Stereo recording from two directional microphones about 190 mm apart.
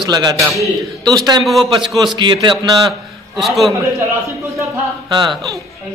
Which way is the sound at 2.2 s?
25° right (ahead or behind).